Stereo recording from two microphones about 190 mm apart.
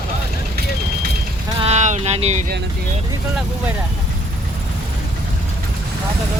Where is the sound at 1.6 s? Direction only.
35° right (ahead or behind).